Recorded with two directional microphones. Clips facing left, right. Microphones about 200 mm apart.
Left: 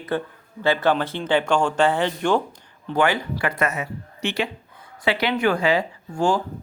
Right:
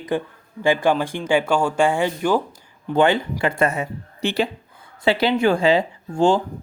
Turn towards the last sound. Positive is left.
turn(degrees=-25)  # may be behind; listen again after turning